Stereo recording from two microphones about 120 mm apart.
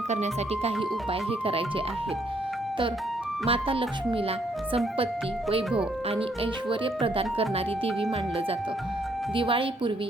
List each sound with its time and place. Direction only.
0.1 s speech: 70° right (ahead or behind)
1.3 s speech: 50° right (ahead or behind)
3.4 s speech: 50° right (ahead or behind)
6.1 s speech: 50° right (ahead or behind)
9.3 s speech: 45° right (ahead or behind)